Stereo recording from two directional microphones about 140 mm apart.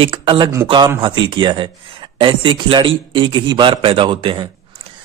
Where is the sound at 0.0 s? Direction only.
40° right (ahead or behind).